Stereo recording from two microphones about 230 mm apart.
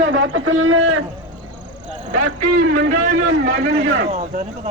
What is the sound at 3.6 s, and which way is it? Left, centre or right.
Speech, right.